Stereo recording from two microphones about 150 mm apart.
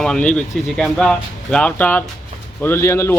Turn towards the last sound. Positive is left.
turn(degrees=20)  # may be behind; listen again after turning